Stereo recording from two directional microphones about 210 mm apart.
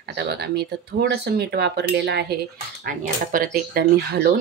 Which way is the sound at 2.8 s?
40° right (ahead or behind).